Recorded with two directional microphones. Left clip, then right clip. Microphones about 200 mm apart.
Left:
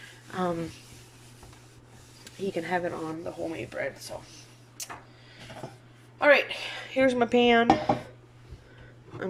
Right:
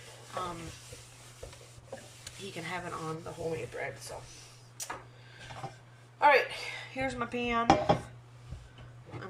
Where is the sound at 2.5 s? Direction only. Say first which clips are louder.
Left 9 dB; 35° left (ahead or behind).